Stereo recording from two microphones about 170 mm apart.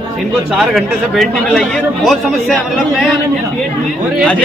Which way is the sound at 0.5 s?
Centre (ahead or behind).